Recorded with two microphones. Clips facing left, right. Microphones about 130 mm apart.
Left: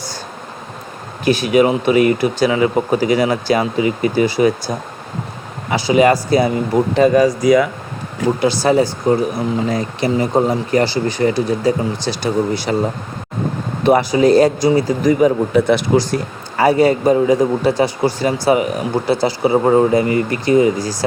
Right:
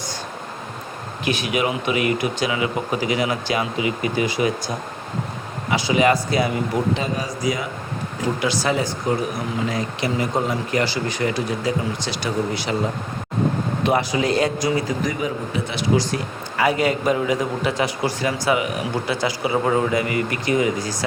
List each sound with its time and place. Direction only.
1.2 s speech: 35° left (ahead or behind)
5.7 s speech: 35° left (ahead or behind)
7.1 s speech: 75° left (ahead or behind)
8.4 s speech: 35° left (ahead or behind)
13.8 s speech: 35° left (ahead or behind)
15.5 s speech: 50° left (ahead or behind)